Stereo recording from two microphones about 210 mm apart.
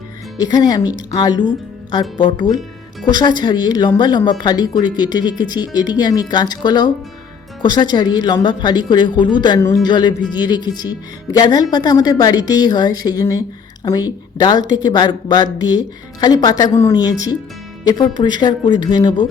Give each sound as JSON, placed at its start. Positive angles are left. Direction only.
{"t": 0.4, "sound": "speech", "side_deg": 20}
{"t": 18.2, "sound": "speech", "side_deg": 20}